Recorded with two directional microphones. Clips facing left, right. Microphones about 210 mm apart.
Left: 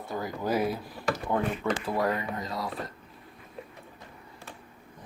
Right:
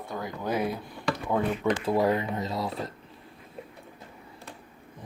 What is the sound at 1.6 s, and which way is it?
Speech, 15° right (ahead or behind).